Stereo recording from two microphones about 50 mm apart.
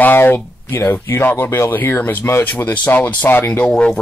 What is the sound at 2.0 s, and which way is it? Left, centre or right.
Speech, left.